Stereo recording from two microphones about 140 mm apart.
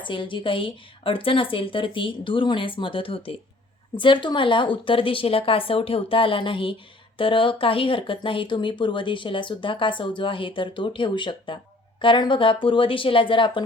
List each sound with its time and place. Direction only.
0.0 s speech: 35° left (ahead or behind)